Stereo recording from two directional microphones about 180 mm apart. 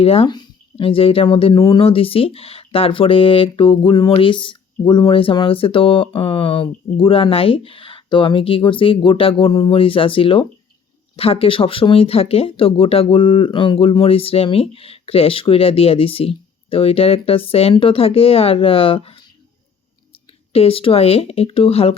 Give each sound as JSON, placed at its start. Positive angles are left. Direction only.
{"t": 0.0, "sound": "speech", "side_deg": 35}
{"t": 20.5, "sound": "speech", "side_deg": 35}